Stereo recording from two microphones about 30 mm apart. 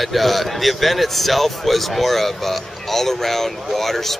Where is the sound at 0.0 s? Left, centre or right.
Centre.